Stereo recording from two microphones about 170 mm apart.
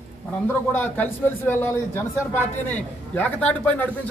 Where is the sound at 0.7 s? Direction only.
10° left (ahead or behind).